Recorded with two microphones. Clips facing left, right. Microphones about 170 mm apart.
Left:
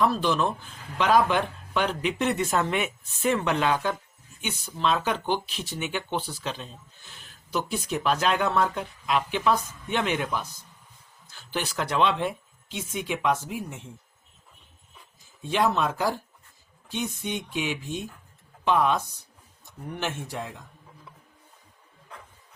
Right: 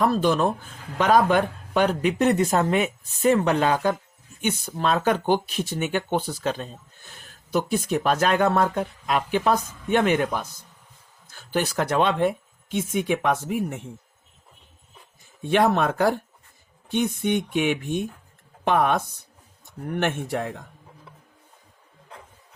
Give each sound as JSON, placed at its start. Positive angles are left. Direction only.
{"t": 0.0, "sound": "speech", "side_deg": -45}
{"t": 15.2, "sound": "speech", "side_deg": -60}